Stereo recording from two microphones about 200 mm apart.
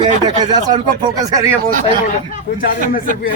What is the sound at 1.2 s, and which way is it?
Speech, 15° right (ahead or behind).